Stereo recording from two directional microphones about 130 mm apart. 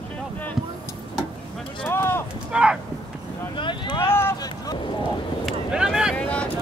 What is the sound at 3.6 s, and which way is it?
Boat, 40° left (ahead or behind).